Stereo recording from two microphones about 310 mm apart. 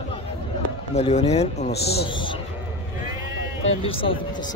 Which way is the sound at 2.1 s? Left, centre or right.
Centre.